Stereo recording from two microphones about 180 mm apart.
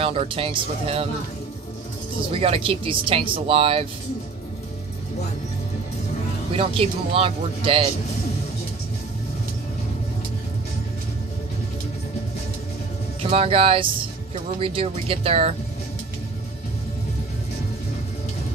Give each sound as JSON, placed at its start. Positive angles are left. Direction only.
{"t": 0.0, "sound": "speech", "side_deg": -30}
{"t": 2.3, "sound": "speech", "side_deg": -30}
{"t": 6.5, "sound": "speech", "side_deg": -30}
{"t": 13.2, "sound": "speech", "side_deg": -30}